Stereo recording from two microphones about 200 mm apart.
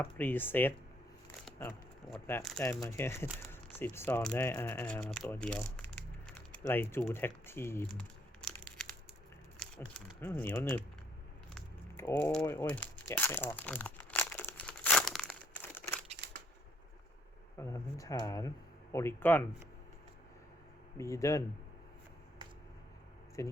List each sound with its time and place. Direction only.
0.0 s speech: 10° left (ahead or behind)
2.2 s speech: 5° left (ahead or behind)
2.6 s speech: 15° left (ahead or behind)
5.7 s crumpling: 5° left (ahead or behind)
7.1 s speech: 10° left (ahead or behind)
10.2 s speech: 10° left (ahead or behind)
12.2 s crumpling: 10° left (ahead or behind)
16.1 s scissors: 55° right (ahead or behind)
17.6 s speech: 15° left (ahead or behind)
21.0 s speech: 15° left (ahead or behind)
23.4 s speech: 15° left (ahead or behind)